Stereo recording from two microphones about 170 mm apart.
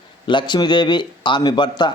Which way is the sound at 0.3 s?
25° left (ahead or behind).